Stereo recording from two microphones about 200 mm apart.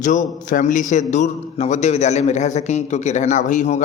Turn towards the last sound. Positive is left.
turn(degrees=35)  # may be behind; listen again after turning